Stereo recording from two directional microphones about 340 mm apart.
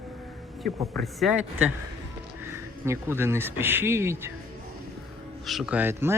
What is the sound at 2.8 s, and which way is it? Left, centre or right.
Speech, centre.